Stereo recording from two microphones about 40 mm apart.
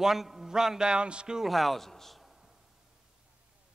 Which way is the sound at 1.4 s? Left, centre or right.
Centre.